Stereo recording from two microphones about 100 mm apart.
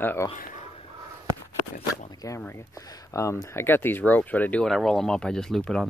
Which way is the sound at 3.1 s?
30° left (ahead or behind).